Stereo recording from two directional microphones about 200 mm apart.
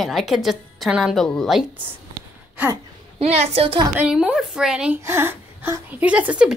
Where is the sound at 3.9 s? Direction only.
5° right (ahead or behind).